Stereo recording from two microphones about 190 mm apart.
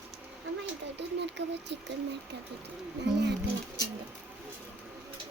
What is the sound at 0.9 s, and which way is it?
Speech, 65° right (ahead or behind).